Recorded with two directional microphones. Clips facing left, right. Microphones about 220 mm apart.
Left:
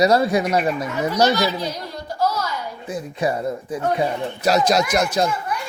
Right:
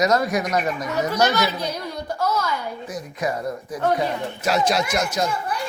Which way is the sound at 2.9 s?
30° left (ahead or behind).